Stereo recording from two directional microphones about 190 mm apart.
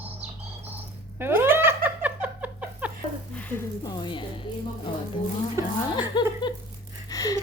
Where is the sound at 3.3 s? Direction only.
10° left (ahead or behind); by 4.4 s 25° left (ahead or behind).